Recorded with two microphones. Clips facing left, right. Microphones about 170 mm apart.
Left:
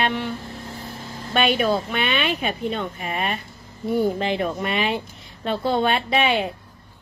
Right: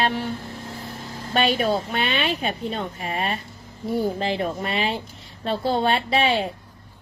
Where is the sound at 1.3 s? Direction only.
35° right (ahead or behind).